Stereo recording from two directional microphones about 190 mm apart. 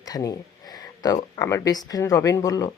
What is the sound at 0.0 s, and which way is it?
Speech, 20° left (ahead or behind).